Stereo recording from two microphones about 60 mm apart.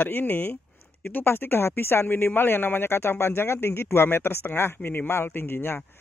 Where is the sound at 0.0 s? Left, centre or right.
Left.